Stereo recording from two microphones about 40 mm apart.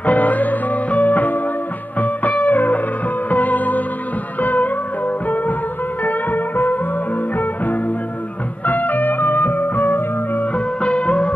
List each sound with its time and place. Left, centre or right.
0.0 s music: left
10.8 s music: left